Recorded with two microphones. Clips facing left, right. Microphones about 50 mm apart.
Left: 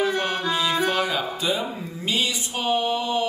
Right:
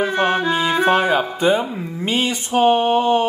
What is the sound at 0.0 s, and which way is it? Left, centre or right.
Music, right.